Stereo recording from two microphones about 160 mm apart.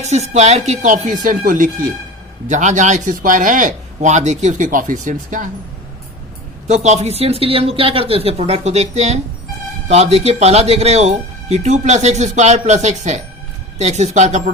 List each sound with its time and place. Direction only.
0.0 s speech: 45° right (ahead or behind)
6.8 s speech: 45° right (ahead or behind)